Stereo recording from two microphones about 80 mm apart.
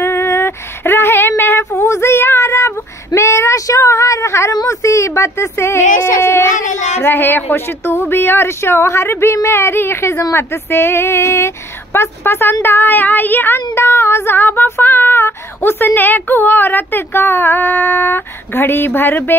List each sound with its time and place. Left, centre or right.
0.0 s a sound: left
1.8 s child singing: left
3.2 s speech: left
7.0 s speech: left
12.6 s female singing: left